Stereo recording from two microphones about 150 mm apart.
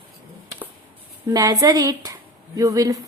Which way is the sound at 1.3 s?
25° right (ahead or behind).